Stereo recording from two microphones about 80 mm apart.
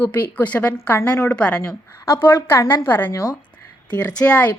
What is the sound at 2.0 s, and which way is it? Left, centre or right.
A woman's voice, left.